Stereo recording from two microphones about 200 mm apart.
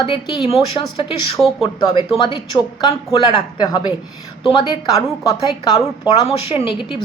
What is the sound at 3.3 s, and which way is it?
Speech, 20° left (ahead or behind).